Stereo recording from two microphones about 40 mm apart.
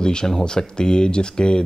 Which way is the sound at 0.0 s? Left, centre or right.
Centre.